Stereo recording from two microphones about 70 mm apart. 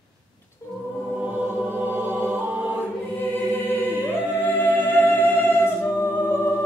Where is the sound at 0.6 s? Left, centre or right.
Left.